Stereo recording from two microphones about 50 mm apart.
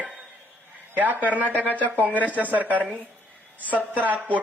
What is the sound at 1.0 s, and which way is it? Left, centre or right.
Speech, right.